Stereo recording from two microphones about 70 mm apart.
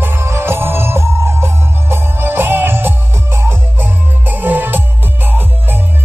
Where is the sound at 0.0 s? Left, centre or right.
Right.